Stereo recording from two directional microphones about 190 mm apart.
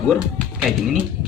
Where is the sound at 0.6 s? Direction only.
Centre (ahead or behind).